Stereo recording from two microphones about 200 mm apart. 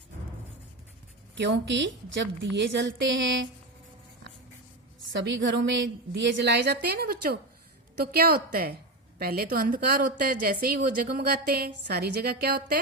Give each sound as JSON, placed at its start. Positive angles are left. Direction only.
{"t": 1.4, "sound": "a woman's voice", "side_deg": -60}
{"t": 5.1, "sound": "a woman's voice", "side_deg": -65}